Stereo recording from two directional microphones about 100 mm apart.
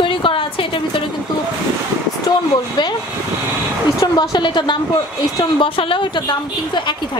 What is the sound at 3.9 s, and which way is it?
Speech, 45° left (ahead or behind).